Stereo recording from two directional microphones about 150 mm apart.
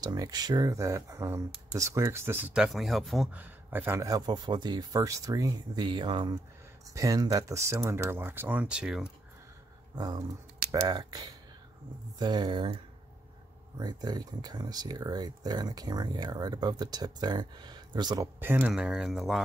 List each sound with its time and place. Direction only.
0.0 s speech: 25° right (ahead or behind)
2.5 s speech: 5° right (ahead or behind)
3.3 s speech: 10° right (ahead or behind); by 6.3 s 35° right (ahead or behind)
6.9 s speech: 20° right (ahead or behind); by 9.1 s 5° right (ahead or behind)
9.9 s speech: 25° right (ahead or behind)
13.7 s speech: 25° right (ahead or behind)
18.4 s speech: 15° right (ahead or behind)